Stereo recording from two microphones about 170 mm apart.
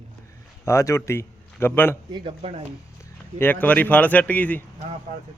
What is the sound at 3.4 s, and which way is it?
A man's voice, 10° left (ahead or behind).